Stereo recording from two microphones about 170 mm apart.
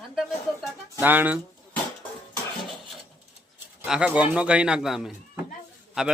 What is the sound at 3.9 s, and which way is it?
A man's voice, 5° right (ahead or behind).